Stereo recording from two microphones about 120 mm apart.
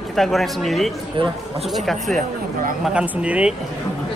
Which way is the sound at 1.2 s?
45° right (ahead or behind).